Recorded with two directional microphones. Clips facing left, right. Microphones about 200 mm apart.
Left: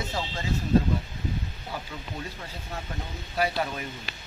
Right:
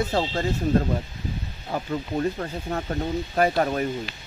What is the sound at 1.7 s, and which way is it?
Speech, 55° right (ahead or behind).